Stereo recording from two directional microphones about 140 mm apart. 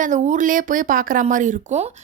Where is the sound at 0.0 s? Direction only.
65° right (ahead or behind).